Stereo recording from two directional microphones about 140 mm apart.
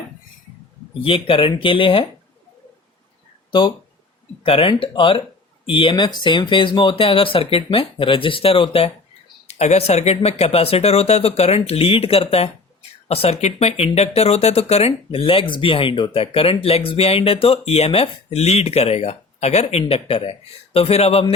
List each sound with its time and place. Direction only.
1.0 s speech: 40° left (ahead or behind)
4.4 s speech: 40° left (ahead or behind)